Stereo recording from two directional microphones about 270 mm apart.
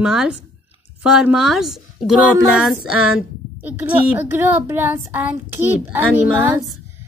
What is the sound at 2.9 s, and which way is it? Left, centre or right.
Speech, left.